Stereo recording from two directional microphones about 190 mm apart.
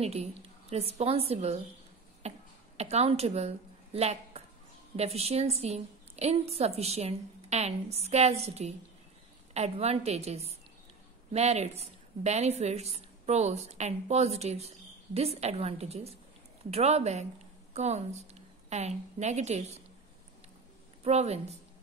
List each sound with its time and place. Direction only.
0.0 s a woman's voice: 35° right (ahead or behind)
2.2 s cough: 35° right (ahead or behind)
2.8 s a woman's voice: 35° right (ahead or behind)
21.0 s a woman's voice: 35° right (ahead or behind)